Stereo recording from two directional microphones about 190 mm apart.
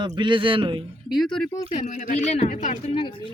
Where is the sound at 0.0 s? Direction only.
25° right (ahead or behind).